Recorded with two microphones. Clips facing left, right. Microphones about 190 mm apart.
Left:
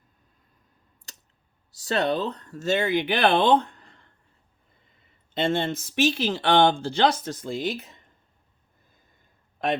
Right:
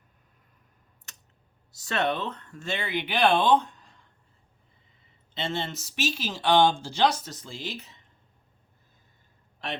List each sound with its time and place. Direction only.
1.7 s speech: 35° left (ahead or behind); by 4.1 s 60° left (ahead or behind)
5.3 s speech: 50° left (ahead or behind)